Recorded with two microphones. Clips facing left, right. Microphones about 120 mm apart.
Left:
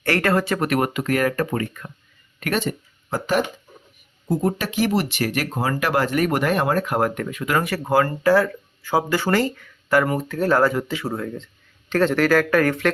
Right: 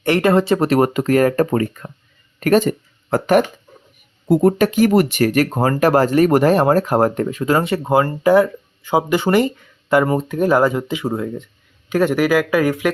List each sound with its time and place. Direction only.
0.0 s speech: 20° right (ahead or behind)